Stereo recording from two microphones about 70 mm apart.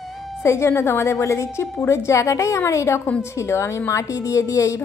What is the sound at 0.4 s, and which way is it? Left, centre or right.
A woman's voice, left.